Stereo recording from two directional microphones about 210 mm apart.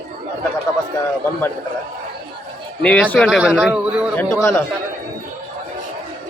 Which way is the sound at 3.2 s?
5° right (ahead or behind).